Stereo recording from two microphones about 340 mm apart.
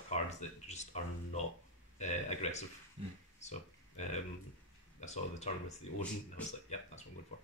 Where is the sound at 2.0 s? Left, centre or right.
Centre.